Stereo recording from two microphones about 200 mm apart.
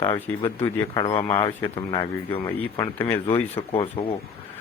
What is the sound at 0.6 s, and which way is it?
Speech, 15° left (ahead or behind).